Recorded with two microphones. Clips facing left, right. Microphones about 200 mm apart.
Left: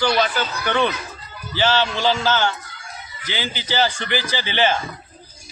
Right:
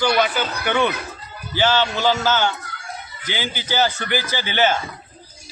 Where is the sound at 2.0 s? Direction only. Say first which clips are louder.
Right 1 dB; 10° left (ahead or behind).